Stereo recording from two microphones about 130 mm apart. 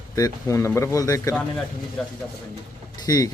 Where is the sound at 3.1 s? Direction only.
30° left (ahead or behind).